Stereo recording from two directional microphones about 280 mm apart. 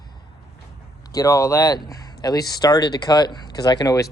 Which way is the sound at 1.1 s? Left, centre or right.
Centre.